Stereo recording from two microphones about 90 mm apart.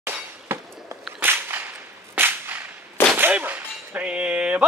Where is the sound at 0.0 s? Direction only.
25° right (ahead or behind).